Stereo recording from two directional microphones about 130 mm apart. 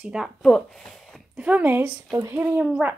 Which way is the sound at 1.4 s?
10° right (ahead or behind).